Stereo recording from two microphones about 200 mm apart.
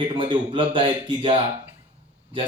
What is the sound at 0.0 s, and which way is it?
Speech, 25° right (ahead or behind).